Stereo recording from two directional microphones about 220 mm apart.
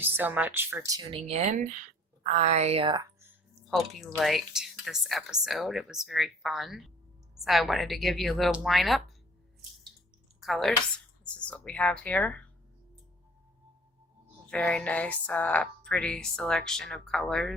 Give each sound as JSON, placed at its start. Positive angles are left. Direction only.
{"t": 0.0, "sound": "speech", "side_deg": -10}
{"t": 1.3, "sound": "speech", "side_deg": -30}
{"t": 3.7, "sound": "speech", "side_deg": 0}
{"t": 10.4, "sound": "speech", "side_deg": 0}
{"t": 14.5, "sound": "speech", "side_deg": 5}